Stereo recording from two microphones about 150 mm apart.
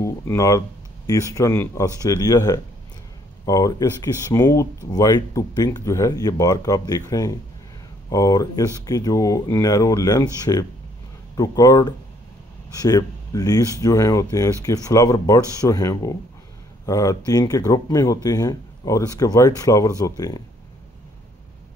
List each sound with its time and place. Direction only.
0.0 s speech: 20° left (ahead or behind)